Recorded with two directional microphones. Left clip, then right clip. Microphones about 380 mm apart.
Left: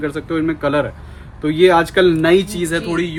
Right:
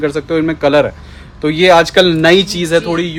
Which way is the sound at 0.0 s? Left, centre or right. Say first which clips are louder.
Right 5 dB; centre.